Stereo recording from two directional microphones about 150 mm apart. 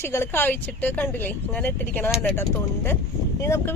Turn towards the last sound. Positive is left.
turn(degrees=20)  # may be behind; listen again after turning